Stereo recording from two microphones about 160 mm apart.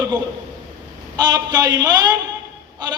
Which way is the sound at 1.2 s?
25° right (ahead or behind).